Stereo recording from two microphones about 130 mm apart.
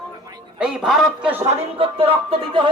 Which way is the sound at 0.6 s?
5° right (ahead or behind).